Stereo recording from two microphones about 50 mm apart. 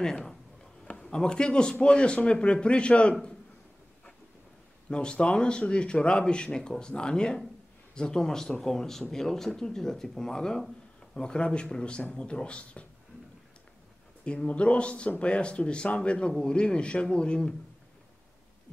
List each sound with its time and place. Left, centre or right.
0.0 s speech: centre
4.8 s speech: centre
14.2 s speech: left